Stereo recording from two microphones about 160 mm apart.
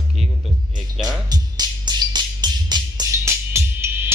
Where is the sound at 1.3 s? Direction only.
25° right (ahead or behind).